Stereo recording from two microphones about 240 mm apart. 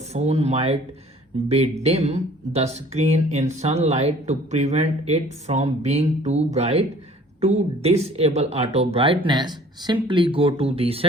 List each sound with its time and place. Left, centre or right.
0.1 s speech: right